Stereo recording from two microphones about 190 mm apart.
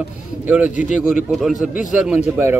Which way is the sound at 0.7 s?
40° left (ahead or behind).